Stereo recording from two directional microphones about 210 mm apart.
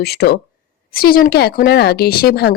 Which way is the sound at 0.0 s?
50° left (ahead or behind).